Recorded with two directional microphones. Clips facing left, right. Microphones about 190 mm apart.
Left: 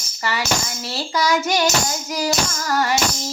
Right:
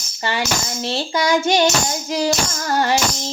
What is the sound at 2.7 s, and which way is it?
Child singing, 30° right (ahead or behind).